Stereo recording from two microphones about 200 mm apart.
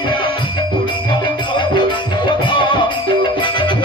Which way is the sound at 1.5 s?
25° left (ahead or behind).